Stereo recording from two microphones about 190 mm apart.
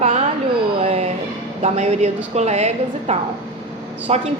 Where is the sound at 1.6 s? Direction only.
35° right (ahead or behind).